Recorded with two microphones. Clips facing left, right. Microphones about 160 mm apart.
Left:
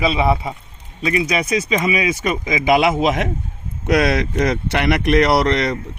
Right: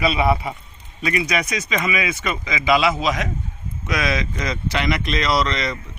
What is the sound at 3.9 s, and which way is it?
Speech, 65° left (ahead or behind).